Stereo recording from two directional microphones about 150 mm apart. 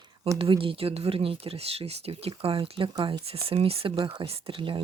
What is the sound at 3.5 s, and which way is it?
Speech, 40° right (ahead or behind).